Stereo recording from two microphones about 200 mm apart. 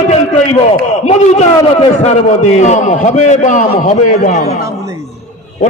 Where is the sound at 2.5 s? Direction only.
35° left (ahead or behind).